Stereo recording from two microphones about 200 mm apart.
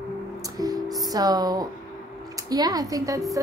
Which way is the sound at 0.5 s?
20° right (ahead or behind).